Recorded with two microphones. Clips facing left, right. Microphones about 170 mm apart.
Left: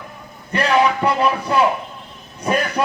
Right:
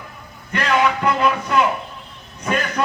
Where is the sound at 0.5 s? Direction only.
30° left (ahead or behind).